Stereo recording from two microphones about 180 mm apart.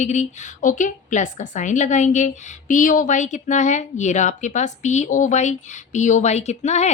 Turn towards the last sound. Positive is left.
turn(degrees=40)  # may be behind; listen again after turning